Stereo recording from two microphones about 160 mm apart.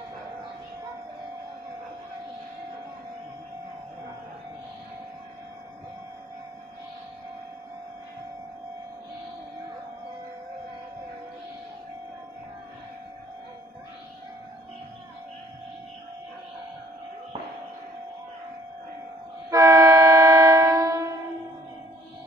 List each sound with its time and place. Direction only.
19.5 s train: 20° right (ahead or behind)